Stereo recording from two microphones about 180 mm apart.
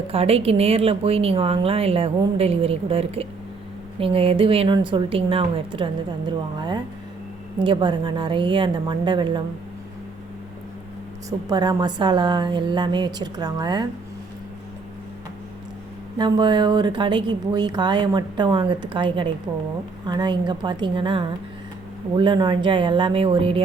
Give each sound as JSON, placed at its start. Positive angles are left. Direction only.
{"t": 0.1, "sound": "a woman's voice", "side_deg": -35}
{"t": 11.3, "sound": "a woman's voice", "side_deg": -20}
{"t": 16.1, "sound": "a woman's voice", "side_deg": -25}